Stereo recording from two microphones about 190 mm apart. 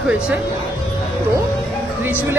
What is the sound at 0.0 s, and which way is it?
Speech, 10° right (ahead or behind).